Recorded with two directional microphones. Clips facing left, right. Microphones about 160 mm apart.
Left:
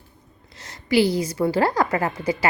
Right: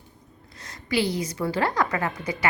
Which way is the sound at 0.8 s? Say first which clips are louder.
Left 6 dB; 30° left (ahead or behind).